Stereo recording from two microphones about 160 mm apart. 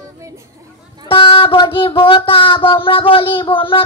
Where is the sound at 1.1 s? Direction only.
35° left (ahead or behind).